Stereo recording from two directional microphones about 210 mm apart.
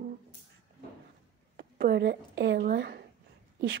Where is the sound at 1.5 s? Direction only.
50° right (ahead or behind).